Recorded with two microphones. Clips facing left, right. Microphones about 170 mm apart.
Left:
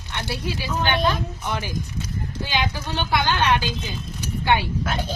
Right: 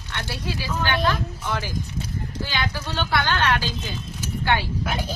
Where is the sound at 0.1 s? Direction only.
15° left (ahead or behind).